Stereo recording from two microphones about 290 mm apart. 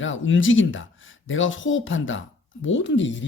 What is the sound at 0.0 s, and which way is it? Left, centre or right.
A woman's voice, left.